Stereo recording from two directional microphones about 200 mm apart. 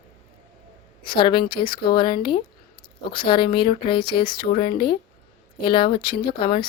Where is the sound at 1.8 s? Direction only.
25° left (ahead or behind).